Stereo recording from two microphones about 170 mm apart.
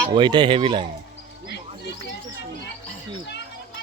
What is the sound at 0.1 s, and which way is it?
Speech, 25° right (ahead or behind).